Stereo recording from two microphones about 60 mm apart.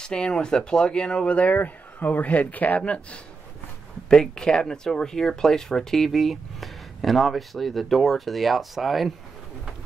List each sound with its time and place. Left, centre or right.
0.0 s speech: centre